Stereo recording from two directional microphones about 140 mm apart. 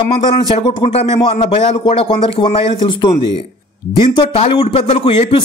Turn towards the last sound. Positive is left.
turn(degrees=45)  # may be behind; listen again after turning